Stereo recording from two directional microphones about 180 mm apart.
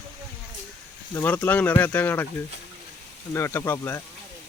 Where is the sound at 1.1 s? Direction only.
10° left (ahead or behind).